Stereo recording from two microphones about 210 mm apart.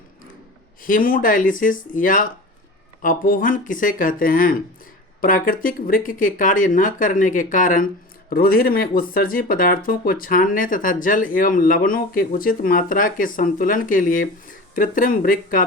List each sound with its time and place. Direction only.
0.8 s speech: 40° left (ahead or behind)